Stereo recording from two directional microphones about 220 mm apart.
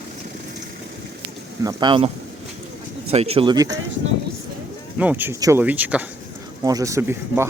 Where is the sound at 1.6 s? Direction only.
20° right (ahead or behind).